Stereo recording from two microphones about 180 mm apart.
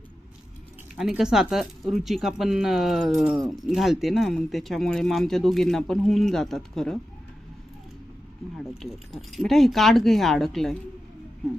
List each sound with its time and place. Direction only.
0.9 s speech: 5° right (ahead or behind)
8.5 s speech: centre (ahead or behind)